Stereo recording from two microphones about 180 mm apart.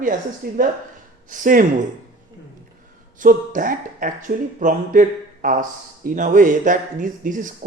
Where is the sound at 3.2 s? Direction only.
50° right (ahead or behind).